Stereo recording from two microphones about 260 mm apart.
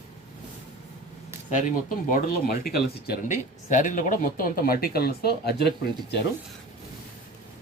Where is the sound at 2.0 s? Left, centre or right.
Left.